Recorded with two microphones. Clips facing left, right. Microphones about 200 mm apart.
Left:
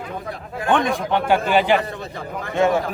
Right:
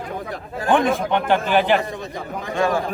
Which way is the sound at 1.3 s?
10° left (ahead or behind).